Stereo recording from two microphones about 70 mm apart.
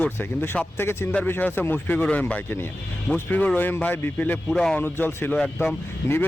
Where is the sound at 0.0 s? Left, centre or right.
Left.